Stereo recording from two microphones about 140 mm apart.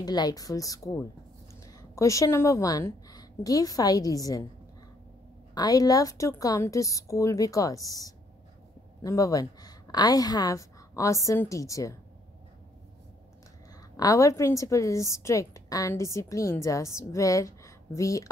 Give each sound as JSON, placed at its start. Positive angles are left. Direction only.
{"t": 0.0, "sound": "a woman's voice", "side_deg": 30}
{"t": 5.5, "sound": "a woman's voice", "side_deg": 30}
{"t": 13.9, "sound": "a woman's voice", "side_deg": 25}